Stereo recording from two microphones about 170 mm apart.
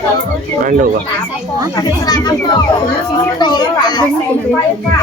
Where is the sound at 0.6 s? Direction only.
50° right (ahead or behind).